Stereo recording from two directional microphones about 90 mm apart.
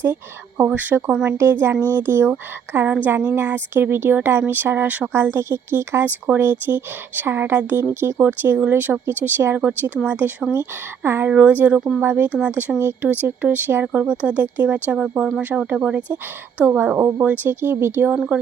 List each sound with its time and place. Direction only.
0.0 s a woman's voice: 20° right (ahead or behind)